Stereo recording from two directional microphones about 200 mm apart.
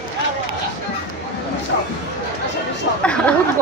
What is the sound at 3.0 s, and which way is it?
Speech, 5° left (ahead or behind).